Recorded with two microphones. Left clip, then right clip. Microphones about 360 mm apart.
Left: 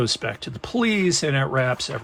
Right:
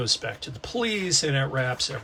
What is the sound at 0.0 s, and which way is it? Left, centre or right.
Speech, left.